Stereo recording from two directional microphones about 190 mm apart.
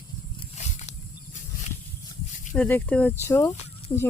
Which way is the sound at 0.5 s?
40° left (ahead or behind).